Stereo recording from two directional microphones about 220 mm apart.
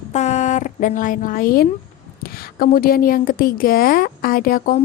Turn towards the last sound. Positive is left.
turn(degrees=40)  # may be behind; listen again after turning